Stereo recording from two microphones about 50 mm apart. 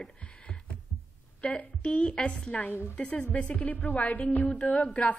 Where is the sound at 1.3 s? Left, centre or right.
Left.